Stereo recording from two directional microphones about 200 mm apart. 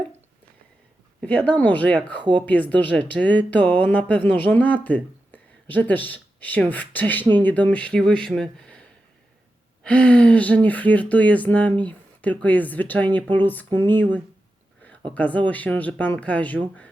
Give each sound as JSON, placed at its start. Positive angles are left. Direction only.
{"t": 1.2, "sound": "speech", "side_deg": 5}
{"t": 2.1, "sound": "speech", "side_deg": -25}
{"t": 2.5, "sound": "speech", "side_deg": 5}